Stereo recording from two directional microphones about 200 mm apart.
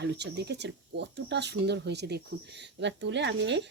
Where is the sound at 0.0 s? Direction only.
55° right (ahead or behind).